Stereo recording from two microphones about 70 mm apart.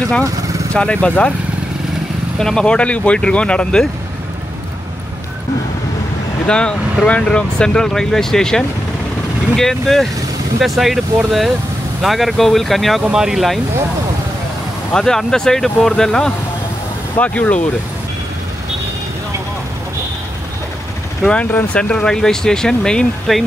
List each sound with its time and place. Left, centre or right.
0.2 s vehicle: right
0.7 s speech: centre
2.3 s speech: centre
6.4 s speech: centre
14.9 s speech: centre
17.2 s speech: centre
21.7 s speech: centre